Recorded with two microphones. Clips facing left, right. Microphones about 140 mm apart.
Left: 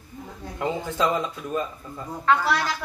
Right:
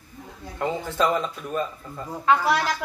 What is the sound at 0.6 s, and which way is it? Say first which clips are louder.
Speech: right 1 dB; 15° left (ahead or behind).